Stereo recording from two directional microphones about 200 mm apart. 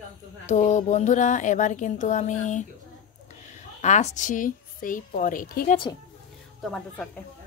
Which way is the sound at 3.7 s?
35° left (ahead or behind).